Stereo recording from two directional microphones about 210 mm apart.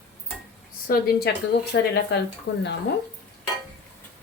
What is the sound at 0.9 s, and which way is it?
Speech, 45° left (ahead or behind).